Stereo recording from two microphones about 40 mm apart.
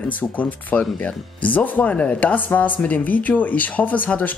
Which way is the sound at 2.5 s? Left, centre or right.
Left.